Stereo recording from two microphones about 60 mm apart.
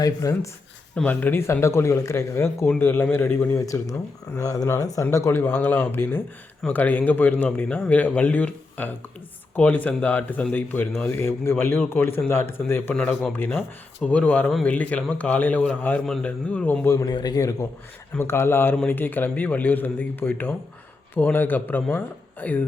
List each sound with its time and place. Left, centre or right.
0.0 s speech: left
1.0 s speech: left
1.6 s speech: left
4.4 s a man's voice: left
5.4 s speech: left
16.9 s a man's voice: left
18.2 s speech: left